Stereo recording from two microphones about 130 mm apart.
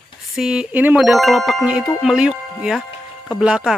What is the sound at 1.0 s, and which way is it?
Speech, centre (ahead or behind).